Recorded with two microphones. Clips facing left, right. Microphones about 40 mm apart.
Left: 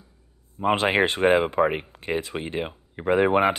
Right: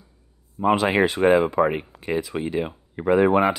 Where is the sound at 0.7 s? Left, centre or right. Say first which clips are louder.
Right 2 dB; left.